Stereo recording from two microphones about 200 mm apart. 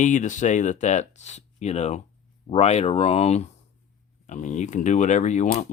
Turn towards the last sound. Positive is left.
turn(degrees=35)  # may be behind; listen again after turning